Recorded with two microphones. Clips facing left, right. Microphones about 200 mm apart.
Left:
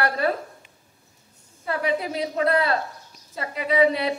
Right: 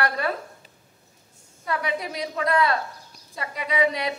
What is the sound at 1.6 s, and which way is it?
A woman's voice, 35° left (ahead or behind).